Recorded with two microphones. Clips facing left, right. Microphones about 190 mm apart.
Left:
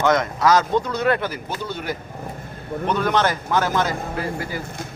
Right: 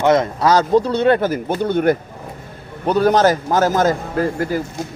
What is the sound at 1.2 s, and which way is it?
Speech, 45° right (ahead or behind).